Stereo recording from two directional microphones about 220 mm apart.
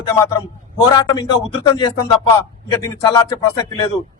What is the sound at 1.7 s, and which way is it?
A man's voice, 15° left (ahead or behind).